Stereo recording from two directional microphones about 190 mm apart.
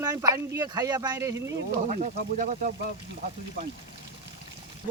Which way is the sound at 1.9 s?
40° right (ahead or behind).